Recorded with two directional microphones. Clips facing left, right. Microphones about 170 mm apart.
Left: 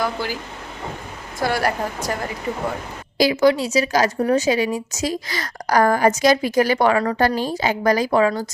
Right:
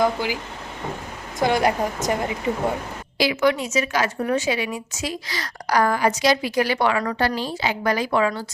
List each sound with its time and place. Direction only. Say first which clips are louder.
0.0 s speech: right 3 dB; 15° right (ahead or behind)
1.4 s speech: right 2 dB; 20° right (ahead or behind)
3.2 s a woman's voice: left 4 dB; 35° left (ahead or behind)